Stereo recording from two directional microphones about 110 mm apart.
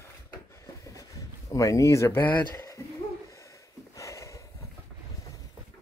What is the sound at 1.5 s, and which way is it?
Speech, 30° left (ahead or behind).